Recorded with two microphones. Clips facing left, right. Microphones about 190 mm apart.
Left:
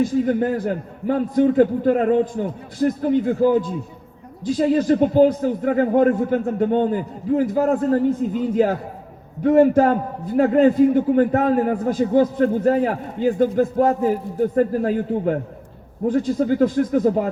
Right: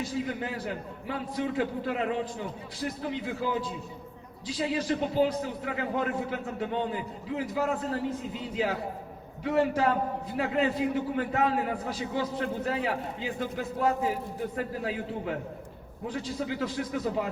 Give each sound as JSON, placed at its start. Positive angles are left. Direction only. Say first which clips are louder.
{"t": 0.0, "sound": "a man's voice", "louder": "left 13 dB", "side_deg": 45}